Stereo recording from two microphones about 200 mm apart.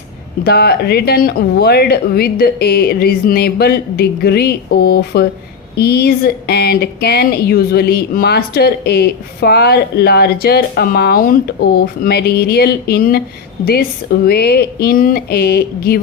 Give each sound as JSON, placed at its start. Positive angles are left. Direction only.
{"t": 0.4, "sound": "speech", "side_deg": 50}